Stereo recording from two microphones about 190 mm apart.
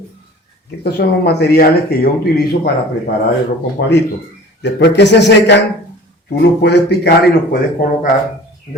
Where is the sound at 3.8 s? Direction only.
65° left (ahead or behind).